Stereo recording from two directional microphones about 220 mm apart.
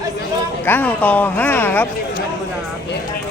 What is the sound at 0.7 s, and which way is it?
Speech, 10° left (ahead or behind).